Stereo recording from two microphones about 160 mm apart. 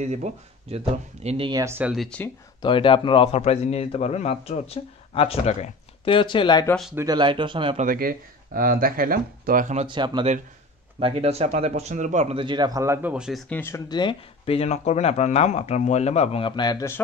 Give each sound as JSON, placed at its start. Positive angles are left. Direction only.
{"t": 0.0, "sound": "speech", "side_deg": -45}
{"t": 1.5, "sound": "speech", "side_deg": -15}
{"t": 1.9, "sound": "speech", "side_deg": 5}
{"t": 2.6, "sound": "a man's voice", "side_deg": 30}
{"t": 6.7, "sound": "speech", "side_deg": 0}
{"t": 7.0, "sound": "speech", "side_deg": -25}
{"t": 7.7, "sound": "speech", "side_deg": -60}
{"t": 9.8, "sound": "speech", "side_deg": -30}
{"t": 13.6, "sound": "a man's voice", "side_deg": 20}